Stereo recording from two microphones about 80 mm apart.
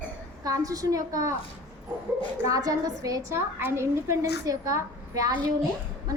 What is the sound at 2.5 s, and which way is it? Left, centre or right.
Speech, right.